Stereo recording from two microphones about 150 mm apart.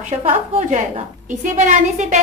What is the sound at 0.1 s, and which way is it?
Speech, 45° right (ahead or behind).